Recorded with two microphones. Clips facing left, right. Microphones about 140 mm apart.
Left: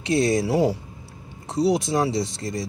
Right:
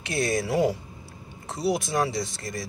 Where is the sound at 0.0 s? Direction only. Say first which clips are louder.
Left 6 dB; 30° left (ahead or behind).